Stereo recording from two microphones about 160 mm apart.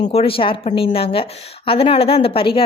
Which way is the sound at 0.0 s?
40° left (ahead or behind).